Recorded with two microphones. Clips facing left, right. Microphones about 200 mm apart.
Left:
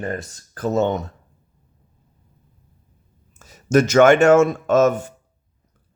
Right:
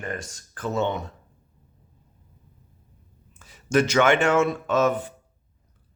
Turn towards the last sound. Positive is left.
turn(degrees=45)  # may be behind; listen again after turning